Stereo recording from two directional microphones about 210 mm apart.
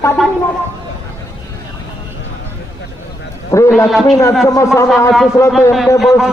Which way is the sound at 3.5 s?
15° left (ahead or behind).